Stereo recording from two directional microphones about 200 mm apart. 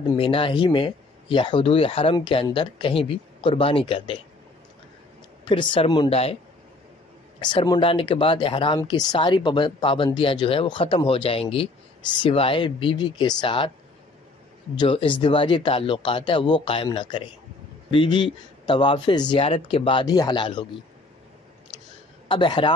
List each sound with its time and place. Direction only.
0.1 s speech: 25° left (ahead or behind)
5.4 s speech: 25° left (ahead or behind)
7.4 s speech: 20° left (ahead or behind)
14.8 s speech: 25° left (ahead or behind)
22.3 s speech: 25° left (ahead or behind)